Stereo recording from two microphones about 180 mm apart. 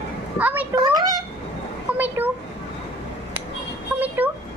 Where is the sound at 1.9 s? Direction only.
10° right (ahead or behind).